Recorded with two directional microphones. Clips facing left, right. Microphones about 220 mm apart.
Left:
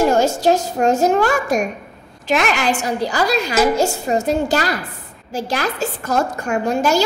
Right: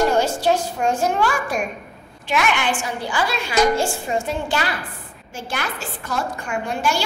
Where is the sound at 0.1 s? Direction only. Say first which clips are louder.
Left 4 dB; 45° left (ahead or behind).